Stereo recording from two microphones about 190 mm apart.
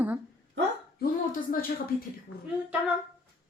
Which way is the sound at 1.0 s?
50° left (ahead or behind).